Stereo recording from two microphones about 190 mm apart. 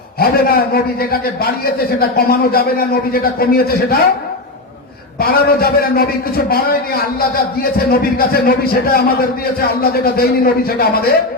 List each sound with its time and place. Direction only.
0.2 s a man's voice: 55° left (ahead or behind)
5.2 s a man's voice: 50° left (ahead or behind)